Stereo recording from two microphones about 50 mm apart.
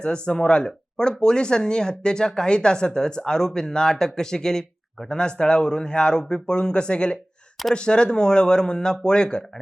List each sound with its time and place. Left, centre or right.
0.0 s speech: centre